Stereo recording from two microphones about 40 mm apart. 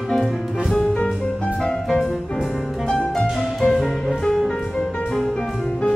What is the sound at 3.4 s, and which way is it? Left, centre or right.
Music, centre.